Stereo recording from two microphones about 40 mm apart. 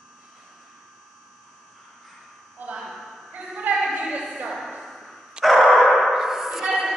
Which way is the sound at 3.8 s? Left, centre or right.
Right.